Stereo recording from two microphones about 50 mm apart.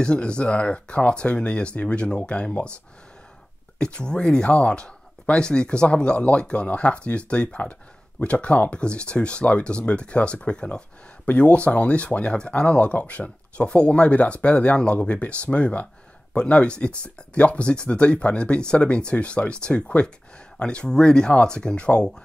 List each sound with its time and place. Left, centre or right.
0.0 s speech: left
3.7 s speech: centre